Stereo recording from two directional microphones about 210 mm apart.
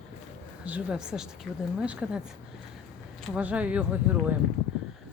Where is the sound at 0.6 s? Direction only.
5° right (ahead or behind).